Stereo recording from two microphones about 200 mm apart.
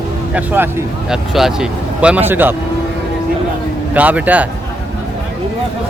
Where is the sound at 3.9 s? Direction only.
5° right (ahead or behind).